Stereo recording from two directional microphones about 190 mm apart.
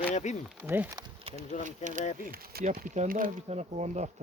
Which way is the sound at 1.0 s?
30° right (ahead or behind).